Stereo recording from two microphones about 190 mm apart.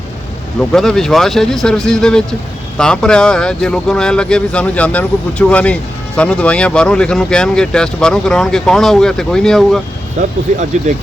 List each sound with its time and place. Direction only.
0.7 s speech: centre (ahead or behind)
10.2 s speech: 40° right (ahead or behind)